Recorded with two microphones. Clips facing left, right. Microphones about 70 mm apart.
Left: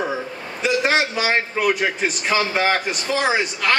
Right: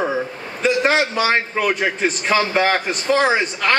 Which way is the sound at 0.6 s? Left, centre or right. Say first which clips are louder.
Right 2 dB; right.